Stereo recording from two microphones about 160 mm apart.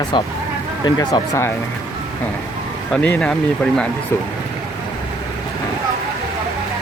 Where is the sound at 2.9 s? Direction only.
5° left (ahead or behind).